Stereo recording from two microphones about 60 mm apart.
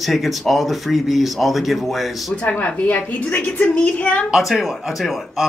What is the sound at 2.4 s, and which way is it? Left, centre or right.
A woman's voice, left.